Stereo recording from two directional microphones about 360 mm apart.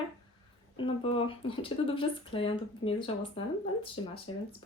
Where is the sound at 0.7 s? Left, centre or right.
Centre.